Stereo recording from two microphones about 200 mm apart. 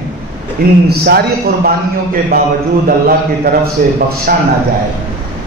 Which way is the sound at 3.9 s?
50° right (ahead or behind).